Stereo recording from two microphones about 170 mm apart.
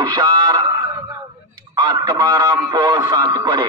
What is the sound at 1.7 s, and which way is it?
Speech, 25° right (ahead or behind).